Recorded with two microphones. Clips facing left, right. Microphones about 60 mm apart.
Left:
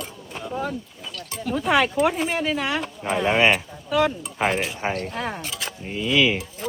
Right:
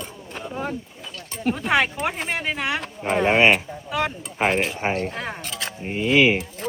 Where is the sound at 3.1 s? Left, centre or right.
Right.